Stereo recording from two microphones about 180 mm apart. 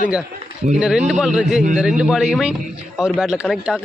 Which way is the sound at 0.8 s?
Centre (ahead or behind).